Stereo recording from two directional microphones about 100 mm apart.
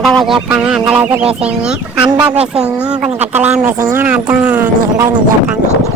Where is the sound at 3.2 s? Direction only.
15° right (ahead or behind).